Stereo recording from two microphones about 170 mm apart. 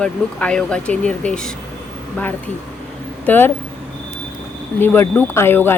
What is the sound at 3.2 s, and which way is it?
Speech, 10° left (ahead or behind).